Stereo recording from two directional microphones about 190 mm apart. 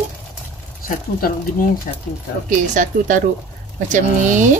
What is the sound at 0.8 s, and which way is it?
Speech, 45° left (ahead or behind).